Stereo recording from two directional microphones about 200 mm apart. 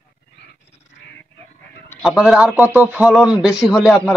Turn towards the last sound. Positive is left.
turn(degrees=0)  # may be behind; listen again after turning